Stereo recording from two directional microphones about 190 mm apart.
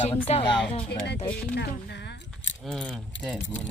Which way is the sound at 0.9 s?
60° left (ahead or behind).